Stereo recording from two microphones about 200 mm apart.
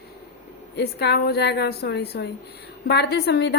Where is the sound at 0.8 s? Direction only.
55° left (ahead or behind).